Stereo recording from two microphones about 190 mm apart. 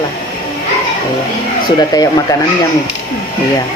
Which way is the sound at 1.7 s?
20° left (ahead or behind).